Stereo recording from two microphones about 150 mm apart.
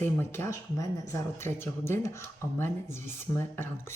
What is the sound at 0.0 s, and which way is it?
Speech, 15° left (ahead or behind).